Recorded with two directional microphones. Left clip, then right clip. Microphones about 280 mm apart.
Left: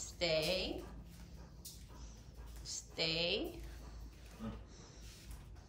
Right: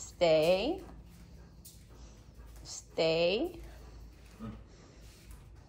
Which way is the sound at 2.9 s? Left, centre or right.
Centre.